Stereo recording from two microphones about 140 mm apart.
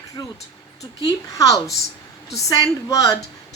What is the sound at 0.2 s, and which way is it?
A woman's voice, 30° left (ahead or behind).